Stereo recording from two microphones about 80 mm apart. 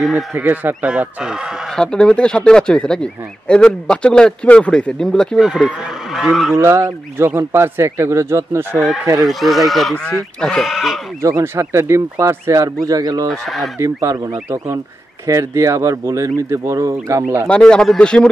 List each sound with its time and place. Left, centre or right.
0.0 s speech: centre
0.4 s speech: right
0.8 s speech: centre
1.8 s speech: centre
5.4 s speech: centre
6.5 s speech: right
8.7 s speech: centre
10.6 s speech: centre
11.4 s speech: right
13.3 s speech: centre
13.7 s speech: right
17.5 s speech: centre